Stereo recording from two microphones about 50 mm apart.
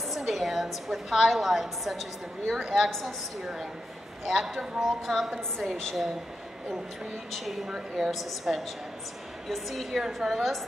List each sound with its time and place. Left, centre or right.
0.1 s a woman's voice: centre
2.9 s a woman's voice: centre
4.3 s a woman's voice: centre
4.7 s a woman's voice: centre
7.3 s a woman's voice: centre